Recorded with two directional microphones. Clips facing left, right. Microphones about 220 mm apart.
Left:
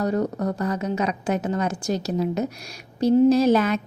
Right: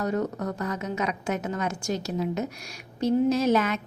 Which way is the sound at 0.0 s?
35° left (ahead or behind).